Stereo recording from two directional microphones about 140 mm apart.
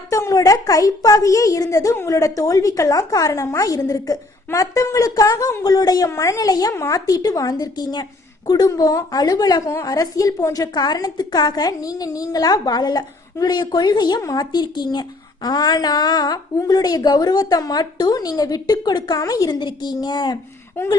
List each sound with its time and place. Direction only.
0.1 s a woman's voice: 25° left (ahead or behind)